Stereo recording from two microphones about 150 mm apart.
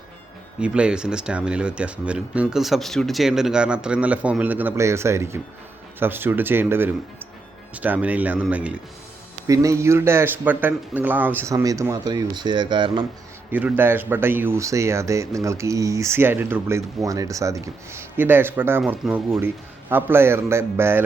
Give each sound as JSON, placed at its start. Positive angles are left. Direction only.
{"t": 0.6, "sound": "speech", "side_deg": -5}
{"t": 9.5, "sound": "speech", "side_deg": -20}
{"t": 13.5, "sound": "speech", "side_deg": -10}